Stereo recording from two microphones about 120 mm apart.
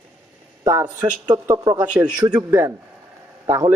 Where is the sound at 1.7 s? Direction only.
15° right (ahead or behind).